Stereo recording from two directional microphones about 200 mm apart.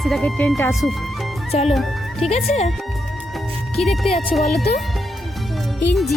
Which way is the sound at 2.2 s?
30° left (ahead or behind).